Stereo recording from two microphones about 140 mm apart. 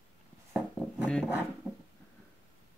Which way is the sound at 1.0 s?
5° left (ahead or behind).